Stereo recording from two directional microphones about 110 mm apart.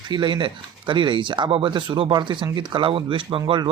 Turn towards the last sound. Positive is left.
turn(degrees=-50)  # may be behind; listen again after turning